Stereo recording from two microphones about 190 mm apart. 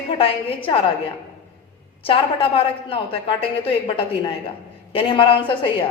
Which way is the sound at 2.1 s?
30° left (ahead or behind).